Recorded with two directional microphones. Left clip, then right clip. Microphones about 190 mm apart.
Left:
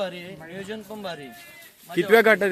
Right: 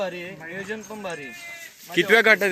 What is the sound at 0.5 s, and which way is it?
A man's voice, 20° left (ahead or behind).